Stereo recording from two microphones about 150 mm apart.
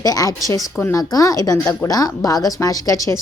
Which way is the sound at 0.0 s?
25° left (ahead or behind).